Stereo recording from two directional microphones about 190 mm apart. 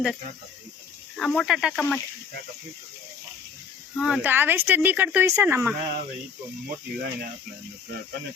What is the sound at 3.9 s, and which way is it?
Speech, centre (ahead or behind).